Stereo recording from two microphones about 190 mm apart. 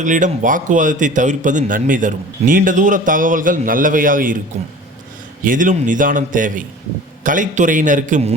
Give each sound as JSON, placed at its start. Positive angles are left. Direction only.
{"t": 0.0, "sound": "a man's voice", "side_deg": -40}
{"t": 5.4, "sound": "a man's voice", "side_deg": -45}